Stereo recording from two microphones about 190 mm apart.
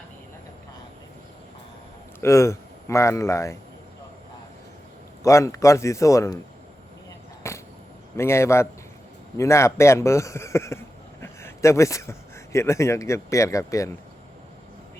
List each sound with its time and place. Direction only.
2.2 s speech: 15° left (ahead or behind)
5.2 s speech: 15° left (ahead or behind)
7.4 s a sound: 15° left (ahead or behind)
8.1 s speech: 15° left (ahead or behind)